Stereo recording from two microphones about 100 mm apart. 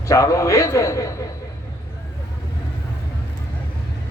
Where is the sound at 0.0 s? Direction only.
30° left (ahead or behind).